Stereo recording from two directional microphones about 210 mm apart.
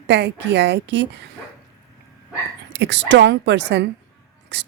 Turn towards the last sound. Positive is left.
turn(degrees=-55)  # may be behind; listen again after turning